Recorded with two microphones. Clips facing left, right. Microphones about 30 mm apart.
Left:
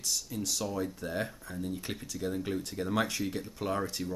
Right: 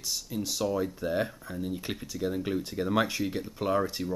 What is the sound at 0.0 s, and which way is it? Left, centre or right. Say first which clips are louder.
Speech: right 1 dB; centre.